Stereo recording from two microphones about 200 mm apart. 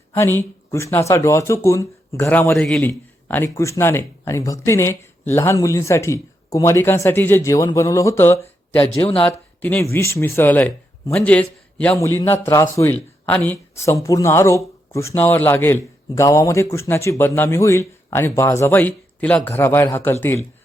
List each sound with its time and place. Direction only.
0.1 s a man's voice: 10° left (ahead or behind)
8.8 s speech: 25° left (ahead or behind)
9.6 s a man's voice: 10° left (ahead or behind)